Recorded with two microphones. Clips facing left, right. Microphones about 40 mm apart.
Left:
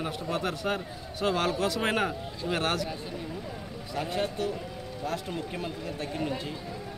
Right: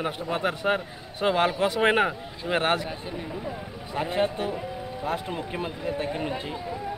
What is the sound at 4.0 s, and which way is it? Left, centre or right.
Speech, right.